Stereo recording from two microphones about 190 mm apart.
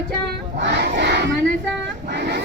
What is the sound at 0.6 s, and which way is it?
Battle cry, 65° right (ahead or behind).